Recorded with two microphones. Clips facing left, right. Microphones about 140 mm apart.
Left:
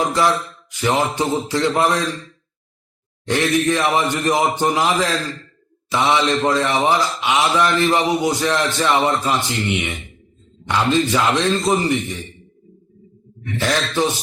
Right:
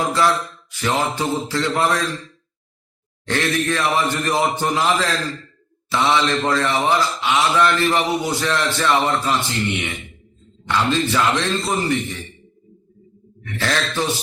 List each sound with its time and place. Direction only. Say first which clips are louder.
0.1 s speech: left 1 dB; 15° left (ahead or behind)
3.2 s speech: left 3 dB; 15° left (ahead or behind)
13.6 s speech: left 3 dB; 15° left (ahead or behind)